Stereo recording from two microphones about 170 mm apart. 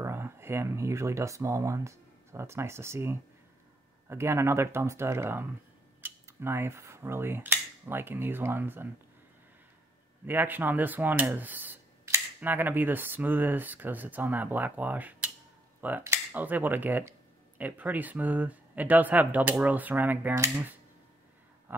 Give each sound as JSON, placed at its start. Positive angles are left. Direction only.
{"t": 0.0, "sound": "speech", "side_deg": -15}
{"t": 10.2, "sound": "speech", "side_deg": -10}